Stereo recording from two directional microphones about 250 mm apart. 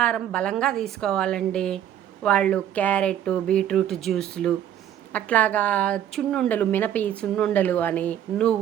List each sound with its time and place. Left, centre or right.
0.0 s speech: centre